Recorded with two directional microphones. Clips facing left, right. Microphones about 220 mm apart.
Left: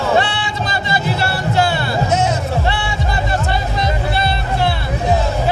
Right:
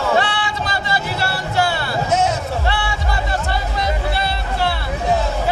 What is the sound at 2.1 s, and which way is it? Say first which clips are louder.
Music: even; centre (ahead or behind).